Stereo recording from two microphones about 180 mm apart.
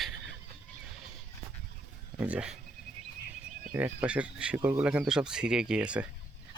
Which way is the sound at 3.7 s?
10° right (ahead or behind).